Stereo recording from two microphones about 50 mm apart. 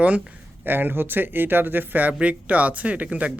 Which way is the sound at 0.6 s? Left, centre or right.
Right.